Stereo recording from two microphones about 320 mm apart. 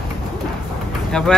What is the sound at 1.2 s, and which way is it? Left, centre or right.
Speech, centre.